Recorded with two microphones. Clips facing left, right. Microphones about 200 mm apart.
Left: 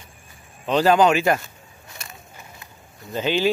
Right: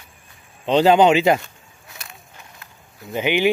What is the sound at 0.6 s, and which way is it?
Speech, 25° right (ahead or behind).